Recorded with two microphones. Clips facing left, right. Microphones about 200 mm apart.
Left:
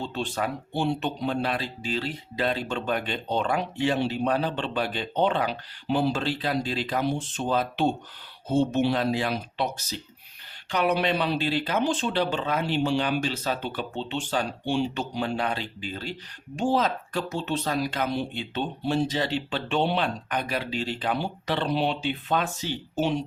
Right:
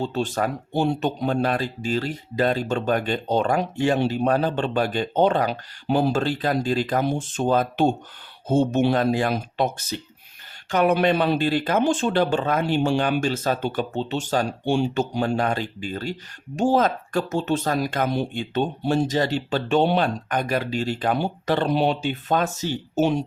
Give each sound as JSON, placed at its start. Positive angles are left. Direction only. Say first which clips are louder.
{"t": 0.0, "sound": "speech", "louder": "right 5 dB", "side_deg": -45}